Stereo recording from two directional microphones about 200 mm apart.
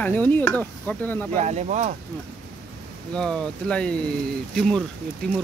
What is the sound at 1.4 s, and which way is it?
Speech, 35° right (ahead or behind).